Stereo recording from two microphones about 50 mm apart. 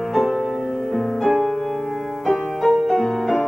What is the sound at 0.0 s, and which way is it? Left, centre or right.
Music, centre.